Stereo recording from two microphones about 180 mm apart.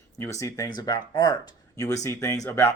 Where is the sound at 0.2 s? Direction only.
15° left (ahead or behind).